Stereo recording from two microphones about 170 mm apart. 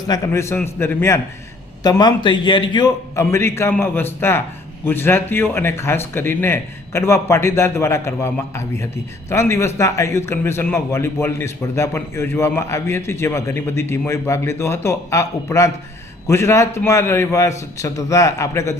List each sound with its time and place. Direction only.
0.1 s a man's voice: 15° left (ahead or behind)